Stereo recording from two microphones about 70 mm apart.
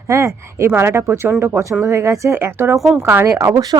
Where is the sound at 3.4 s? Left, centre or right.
Right.